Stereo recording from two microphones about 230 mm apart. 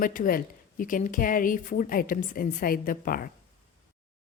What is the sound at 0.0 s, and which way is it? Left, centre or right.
A woman's voice, left.